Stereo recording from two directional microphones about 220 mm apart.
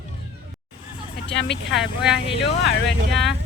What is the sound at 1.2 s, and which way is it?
Speech, 55° left (ahead or behind).